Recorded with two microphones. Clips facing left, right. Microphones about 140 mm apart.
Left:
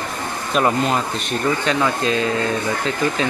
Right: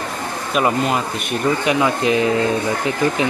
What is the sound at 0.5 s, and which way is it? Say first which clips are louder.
Speech: even; 5° right (ahead or behind).